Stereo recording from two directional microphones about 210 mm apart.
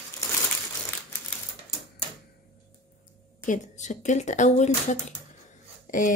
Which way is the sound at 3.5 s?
35° left (ahead or behind).